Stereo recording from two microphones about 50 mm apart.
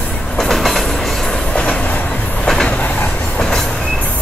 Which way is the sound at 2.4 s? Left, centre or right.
Centre.